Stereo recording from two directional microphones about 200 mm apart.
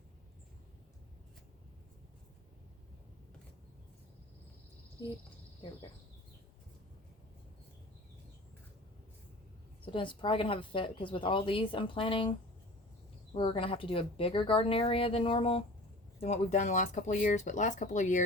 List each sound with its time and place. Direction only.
9.8 s a woman's voice: 25° left (ahead or behind)
13.3 s a woman's voice: 25° left (ahead or behind)